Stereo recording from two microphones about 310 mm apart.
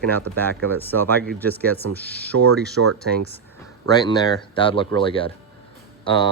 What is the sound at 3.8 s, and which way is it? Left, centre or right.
Speech, centre.